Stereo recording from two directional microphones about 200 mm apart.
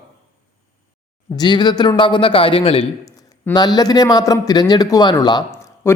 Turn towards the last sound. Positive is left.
turn(degrees=15)  # may be behind; listen again after turning